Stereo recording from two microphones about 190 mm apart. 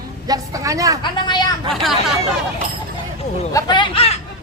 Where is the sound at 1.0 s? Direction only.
25° left (ahead or behind).